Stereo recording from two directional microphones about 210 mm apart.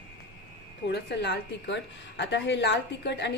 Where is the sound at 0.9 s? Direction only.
55° left (ahead or behind).